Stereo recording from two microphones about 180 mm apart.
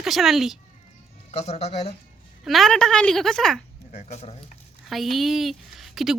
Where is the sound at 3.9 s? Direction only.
40° left (ahead or behind).